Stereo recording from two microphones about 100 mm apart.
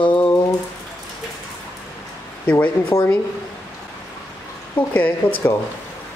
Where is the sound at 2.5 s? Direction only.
15° left (ahead or behind).